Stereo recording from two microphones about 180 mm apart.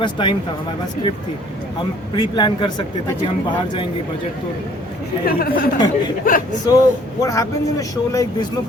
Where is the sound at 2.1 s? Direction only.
25° left (ahead or behind).